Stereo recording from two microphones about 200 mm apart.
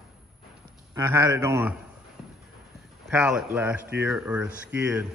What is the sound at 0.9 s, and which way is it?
Speech, 15° right (ahead or behind).